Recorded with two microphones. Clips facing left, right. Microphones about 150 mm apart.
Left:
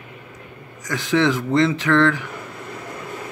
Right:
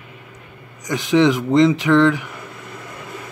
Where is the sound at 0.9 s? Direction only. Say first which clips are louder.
Right 4 dB; 15° right (ahead or behind).